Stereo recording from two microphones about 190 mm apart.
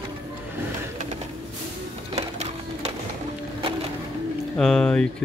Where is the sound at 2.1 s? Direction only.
35° right (ahead or behind).